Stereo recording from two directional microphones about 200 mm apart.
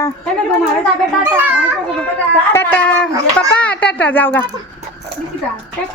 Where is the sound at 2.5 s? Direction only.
10° left (ahead or behind).